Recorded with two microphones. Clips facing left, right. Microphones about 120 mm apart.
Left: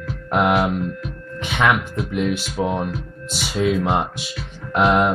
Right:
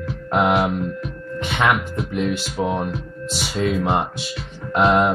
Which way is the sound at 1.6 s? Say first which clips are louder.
Left 1 dB; 5° right (ahead or behind).